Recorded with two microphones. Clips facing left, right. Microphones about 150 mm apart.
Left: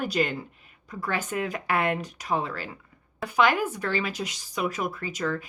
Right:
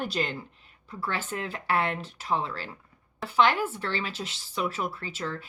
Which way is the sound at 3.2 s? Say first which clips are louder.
Left 1 dB; 15° left (ahead or behind).